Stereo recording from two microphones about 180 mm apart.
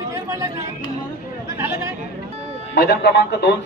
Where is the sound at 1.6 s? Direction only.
15° right (ahead or behind).